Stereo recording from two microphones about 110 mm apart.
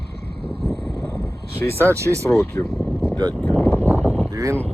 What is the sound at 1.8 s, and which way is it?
Speech, 25° right (ahead or behind).